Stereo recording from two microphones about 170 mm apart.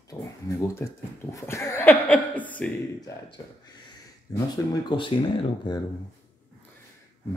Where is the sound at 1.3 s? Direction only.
15° left (ahead or behind).